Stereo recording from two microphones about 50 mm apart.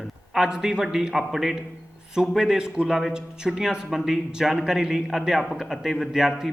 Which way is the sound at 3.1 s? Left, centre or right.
Centre.